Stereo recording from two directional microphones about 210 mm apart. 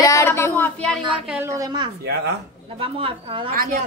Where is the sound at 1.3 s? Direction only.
10° right (ahead or behind).